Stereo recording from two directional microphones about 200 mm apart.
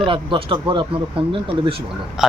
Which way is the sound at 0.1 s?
25° right (ahead or behind).